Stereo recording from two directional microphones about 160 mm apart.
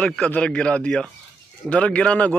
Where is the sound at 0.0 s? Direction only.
10° left (ahead or behind).